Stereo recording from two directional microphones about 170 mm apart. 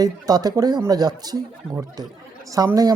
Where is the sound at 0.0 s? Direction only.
20° right (ahead or behind).